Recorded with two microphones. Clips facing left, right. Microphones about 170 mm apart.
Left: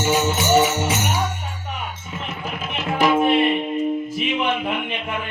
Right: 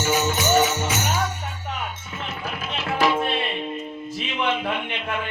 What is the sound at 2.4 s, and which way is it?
Music, 20° left (ahead or behind).